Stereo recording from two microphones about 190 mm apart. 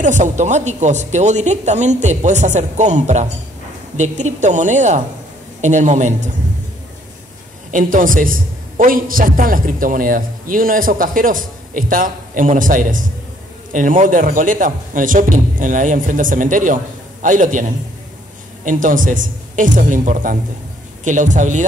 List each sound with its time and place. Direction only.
0.0 s speech: 40° right (ahead or behind)
7.7 s a man's voice: 45° right (ahead or behind)
18.7 s a man's voice: 45° right (ahead or behind)